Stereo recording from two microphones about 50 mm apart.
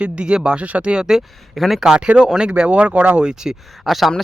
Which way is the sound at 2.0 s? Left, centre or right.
Centre.